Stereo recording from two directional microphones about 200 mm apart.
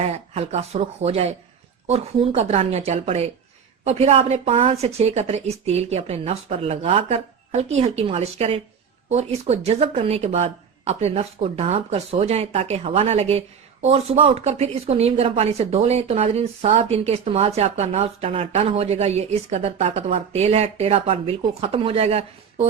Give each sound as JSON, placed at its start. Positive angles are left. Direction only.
{"t": 0.0, "sound": "speech", "side_deg": -30}